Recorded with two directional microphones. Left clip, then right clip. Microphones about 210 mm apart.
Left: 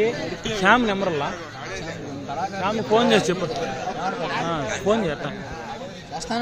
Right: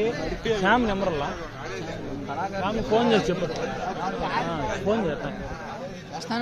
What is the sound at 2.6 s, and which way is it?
Speech, 20° left (ahead or behind).